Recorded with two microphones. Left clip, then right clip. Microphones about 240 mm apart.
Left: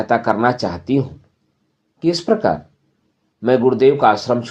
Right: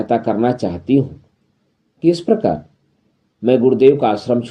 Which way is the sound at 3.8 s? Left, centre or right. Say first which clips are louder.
Left 1 dB; left.